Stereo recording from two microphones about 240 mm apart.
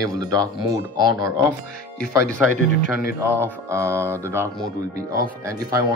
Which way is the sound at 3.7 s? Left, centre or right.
Centre.